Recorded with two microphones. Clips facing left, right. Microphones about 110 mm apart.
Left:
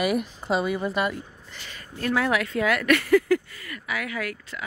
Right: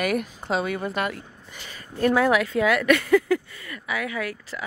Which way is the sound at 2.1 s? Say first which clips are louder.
Right 4 dB; 15° right (ahead or behind).